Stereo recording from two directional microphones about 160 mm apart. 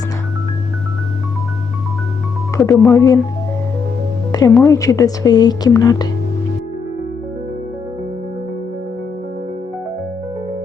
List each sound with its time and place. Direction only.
2.6 s speech: 15° left (ahead or behind)
4.3 s music: 25° left (ahead or behind)
4.6 s speech: 20° left (ahead or behind)